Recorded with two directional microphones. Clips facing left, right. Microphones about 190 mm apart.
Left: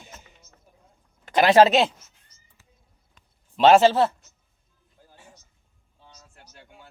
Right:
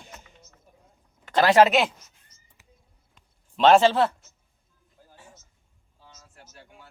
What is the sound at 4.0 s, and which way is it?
Speech, 25° left (ahead or behind).